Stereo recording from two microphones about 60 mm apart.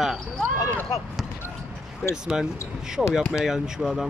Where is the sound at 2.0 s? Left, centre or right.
Centre.